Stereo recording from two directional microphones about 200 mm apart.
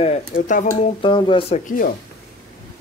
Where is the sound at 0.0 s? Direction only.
40° left (ahead or behind).